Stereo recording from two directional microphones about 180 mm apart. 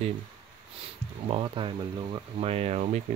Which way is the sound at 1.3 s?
30° right (ahead or behind).